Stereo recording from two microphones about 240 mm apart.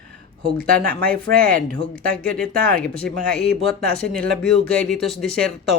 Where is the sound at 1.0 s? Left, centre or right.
Centre.